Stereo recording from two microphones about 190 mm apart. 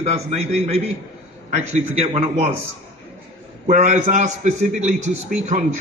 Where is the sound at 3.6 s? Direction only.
40° right (ahead or behind).